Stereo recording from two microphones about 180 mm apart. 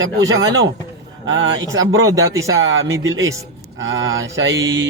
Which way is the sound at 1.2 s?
90° right.